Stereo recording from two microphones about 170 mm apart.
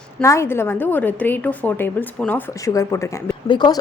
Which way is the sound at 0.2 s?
15° left (ahead or behind).